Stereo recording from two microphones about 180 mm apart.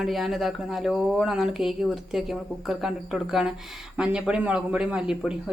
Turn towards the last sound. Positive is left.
turn(degrees=-5)  # may be behind; listen again after turning